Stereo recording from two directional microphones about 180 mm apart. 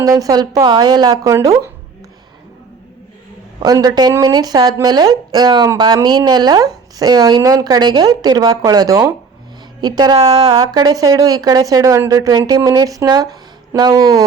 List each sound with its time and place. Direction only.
0.0 s speech: 20° right (ahead or behind)
3.6 s speech: 20° right (ahead or behind)